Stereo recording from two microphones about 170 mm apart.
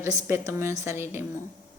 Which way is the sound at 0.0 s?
15° right (ahead or behind).